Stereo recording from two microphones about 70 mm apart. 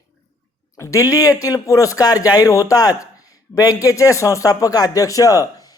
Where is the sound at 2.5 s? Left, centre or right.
Left.